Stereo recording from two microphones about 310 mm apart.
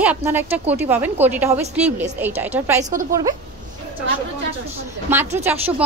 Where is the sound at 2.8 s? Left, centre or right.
Right.